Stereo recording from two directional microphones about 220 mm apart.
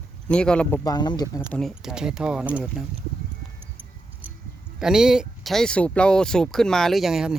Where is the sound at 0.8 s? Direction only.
20° left (ahead or behind).